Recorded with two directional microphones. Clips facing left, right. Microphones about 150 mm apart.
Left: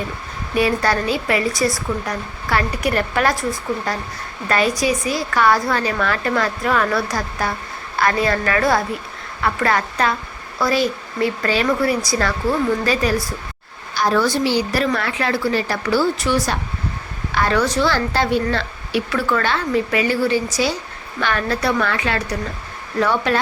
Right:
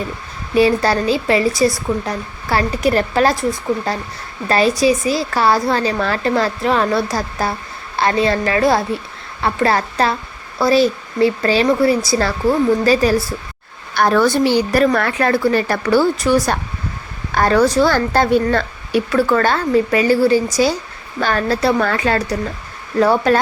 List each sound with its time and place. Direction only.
0.5 s a woman's voice: 30° right (ahead or behind)
4.4 s a woman's voice: 30° right (ahead or behind)
13.9 s a woman's voice: 60° right (ahead or behind); by 23.4 s 40° right (ahead or behind)